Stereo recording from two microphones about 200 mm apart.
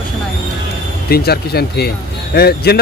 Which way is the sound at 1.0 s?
50° left (ahead or behind).